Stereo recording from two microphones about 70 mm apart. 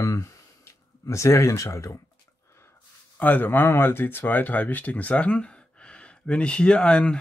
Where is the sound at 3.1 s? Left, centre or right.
Left.